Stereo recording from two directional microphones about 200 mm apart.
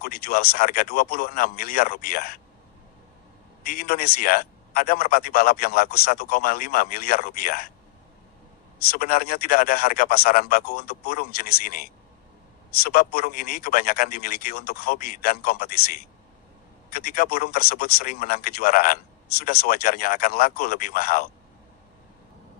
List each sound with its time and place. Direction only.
0.0 s a man's voice: 50° left (ahead or behind)
3.7 s a man's voice: 50° left (ahead or behind)
8.9 s a man's voice: 45° left (ahead or behind)
12.8 s a man's voice: 50° left (ahead or behind)
16.9 s a man's voice: 45° left (ahead or behind)